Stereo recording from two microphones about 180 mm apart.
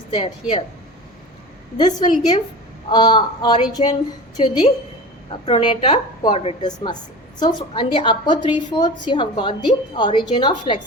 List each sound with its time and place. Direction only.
0.1 s a woman's voice: 30° left (ahead or behind)
1.8 s a woman's voice: 25° left (ahead or behind)